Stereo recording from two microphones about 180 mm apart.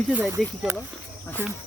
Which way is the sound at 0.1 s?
10° right (ahead or behind).